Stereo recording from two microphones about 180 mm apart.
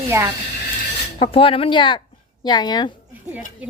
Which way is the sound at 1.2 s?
30° left (ahead or behind).